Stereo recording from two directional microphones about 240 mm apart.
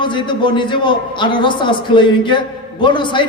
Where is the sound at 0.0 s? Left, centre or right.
Centre.